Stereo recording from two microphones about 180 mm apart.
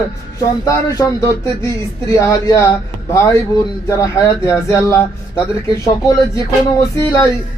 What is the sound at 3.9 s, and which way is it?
Speech, 20° left (ahead or behind).